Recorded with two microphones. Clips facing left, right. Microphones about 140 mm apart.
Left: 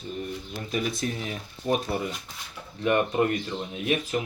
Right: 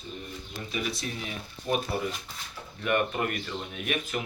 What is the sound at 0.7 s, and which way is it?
Speech, 40° left (ahead or behind).